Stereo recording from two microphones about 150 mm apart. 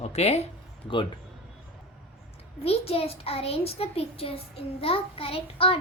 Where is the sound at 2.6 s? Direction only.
40° left (ahead or behind).